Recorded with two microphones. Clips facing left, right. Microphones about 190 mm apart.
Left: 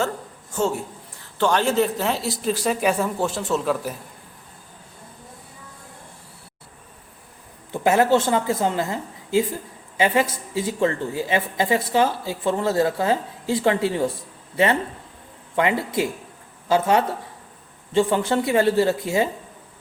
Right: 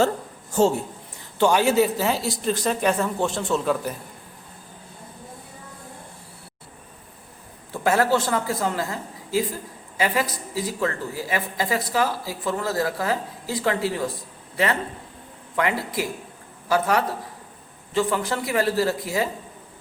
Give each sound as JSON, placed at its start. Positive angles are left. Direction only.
{"t": 1.4, "sound": "speech", "side_deg": -10}
{"t": 7.7, "sound": "speech", "side_deg": 20}